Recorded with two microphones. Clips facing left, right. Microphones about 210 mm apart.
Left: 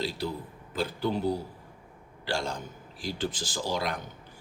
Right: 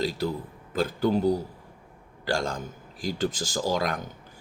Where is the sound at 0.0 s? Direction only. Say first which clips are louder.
Right 4 dB; 45° right (ahead or behind).